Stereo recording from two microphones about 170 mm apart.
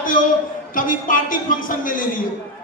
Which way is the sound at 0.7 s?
55° left (ahead or behind).